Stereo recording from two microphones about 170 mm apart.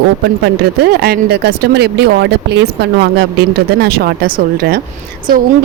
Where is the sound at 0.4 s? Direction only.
70° right (ahead or behind).